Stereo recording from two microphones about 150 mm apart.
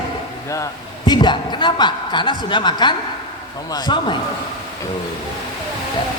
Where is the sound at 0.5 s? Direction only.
25° left (ahead or behind).